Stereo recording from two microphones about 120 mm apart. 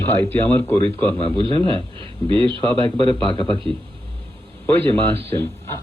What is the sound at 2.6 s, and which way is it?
Speech, 15° left (ahead or behind).